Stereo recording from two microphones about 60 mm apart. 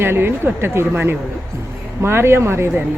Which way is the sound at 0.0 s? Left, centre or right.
Right.